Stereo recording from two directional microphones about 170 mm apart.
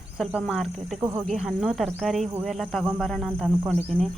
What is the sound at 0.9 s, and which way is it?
Speech, 20° right (ahead or behind).